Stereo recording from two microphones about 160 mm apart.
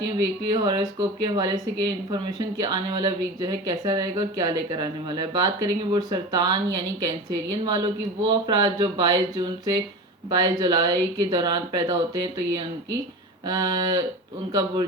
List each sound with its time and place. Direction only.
0.5 s speech: 25° right (ahead or behind)
13.5 s speech: 25° right (ahead or behind)